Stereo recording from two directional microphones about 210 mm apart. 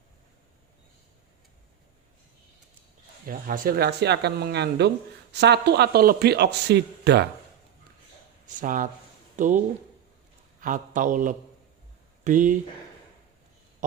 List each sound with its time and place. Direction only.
3.2 s a man's voice: 40° right (ahead or behind)
8.4 s a man's voice: 40° right (ahead or behind)